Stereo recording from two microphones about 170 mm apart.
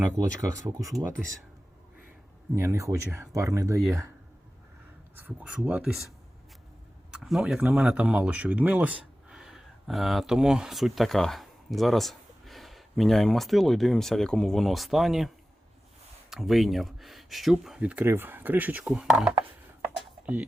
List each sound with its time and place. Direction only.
0.1 s speech: 20° right (ahead or behind)
2.6 s speech: 15° right (ahead or behind)
5.1 s speech: 10° right (ahead or behind)
7.1 s speech: centre (ahead or behind)
16.3 s speech: centre (ahead or behind)
19.8 s a sound: 10° right (ahead or behind)